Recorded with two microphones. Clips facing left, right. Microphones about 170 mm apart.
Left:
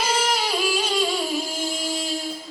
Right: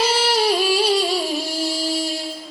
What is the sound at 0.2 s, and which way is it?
Yodeling, 35° right (ahead or behind).